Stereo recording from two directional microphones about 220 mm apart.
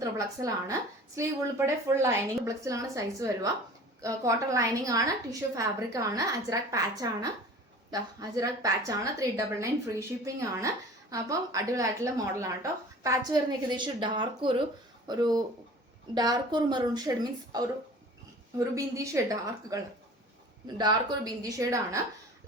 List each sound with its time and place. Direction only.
0.0 s a woman's voice: 15° right (ahead or behind)
11.1 s a woman's voice: 15° right (ahead or behind)
18.7 s a woman's voice: 15° right (ahead or behind)